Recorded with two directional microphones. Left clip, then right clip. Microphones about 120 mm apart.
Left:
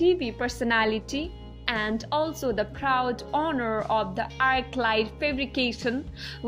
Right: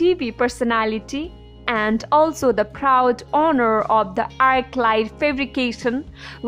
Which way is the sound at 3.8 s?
35° right (ahead or behind).